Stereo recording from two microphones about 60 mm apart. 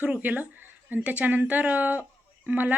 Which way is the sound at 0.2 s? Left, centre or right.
Right.